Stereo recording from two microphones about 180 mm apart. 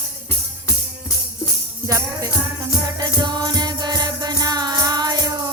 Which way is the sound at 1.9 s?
15° right (ahead or behind).